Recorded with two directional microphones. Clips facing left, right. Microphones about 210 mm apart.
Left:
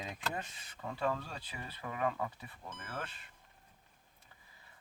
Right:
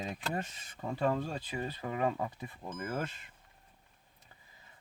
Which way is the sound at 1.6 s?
30° right (ahead or behind).